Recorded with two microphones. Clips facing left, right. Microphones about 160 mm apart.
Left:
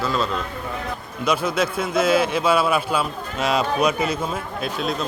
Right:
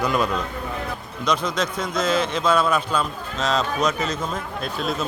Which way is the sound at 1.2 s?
5° left (ahead or behind).